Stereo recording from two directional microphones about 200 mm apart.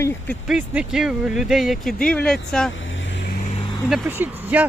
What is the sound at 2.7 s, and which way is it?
Vehicle, 70° left (ahead or behind).